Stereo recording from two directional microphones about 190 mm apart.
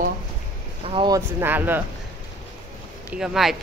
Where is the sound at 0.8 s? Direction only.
25° right (ahead or behind).